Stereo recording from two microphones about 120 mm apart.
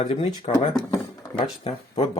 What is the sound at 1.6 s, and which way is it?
Speech, 55° left (ahead or behind).